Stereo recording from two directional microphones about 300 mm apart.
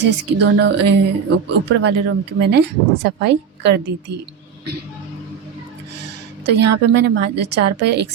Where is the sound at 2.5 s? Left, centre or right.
Right.